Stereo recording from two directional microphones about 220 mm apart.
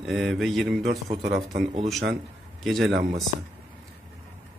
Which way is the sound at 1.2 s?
50° right (ahead or behind).